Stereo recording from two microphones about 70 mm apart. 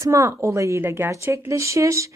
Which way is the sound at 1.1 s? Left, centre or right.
Right.